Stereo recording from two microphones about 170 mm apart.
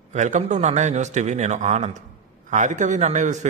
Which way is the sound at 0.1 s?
45° right (ahead or behind).